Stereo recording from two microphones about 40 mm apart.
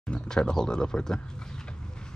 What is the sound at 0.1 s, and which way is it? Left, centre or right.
Speech, left.